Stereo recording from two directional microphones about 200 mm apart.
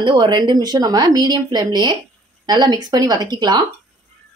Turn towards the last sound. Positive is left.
turn(degrees=-20)  # may be behind; listen again after turning